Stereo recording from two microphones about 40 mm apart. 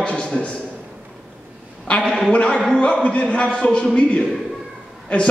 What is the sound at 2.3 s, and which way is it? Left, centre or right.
A man's voice, left.